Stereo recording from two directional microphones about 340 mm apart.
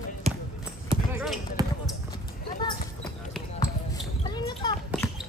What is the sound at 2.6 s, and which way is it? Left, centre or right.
Basketball bounce, centre.